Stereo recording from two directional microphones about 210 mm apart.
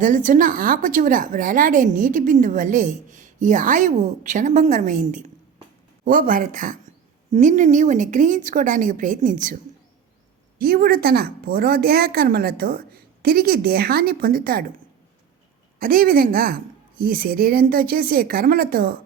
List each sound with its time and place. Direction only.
0.0 s a woman's voice: 40° right (ahead or behind)
10.6 s speech: 45° right (ahead or behind)
15.8 s speech: 45° right (ahead or behind)